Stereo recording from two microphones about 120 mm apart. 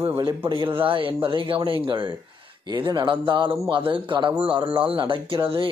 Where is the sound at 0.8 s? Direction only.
45° right (ahead or behind).